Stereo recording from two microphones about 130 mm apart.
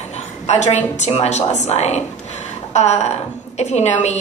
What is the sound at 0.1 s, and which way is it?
A woman's voice, 60° left (ahead or behind).